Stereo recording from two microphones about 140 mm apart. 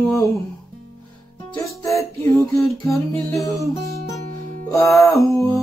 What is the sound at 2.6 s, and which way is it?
Music, 20° left (ahead or behind).